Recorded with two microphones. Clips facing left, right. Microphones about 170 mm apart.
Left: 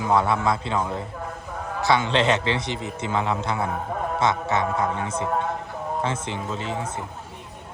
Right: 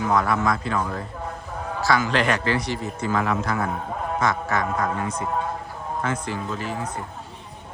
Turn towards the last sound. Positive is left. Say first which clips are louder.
# even
turn(degrees=25)  # may be behind; listen again after turning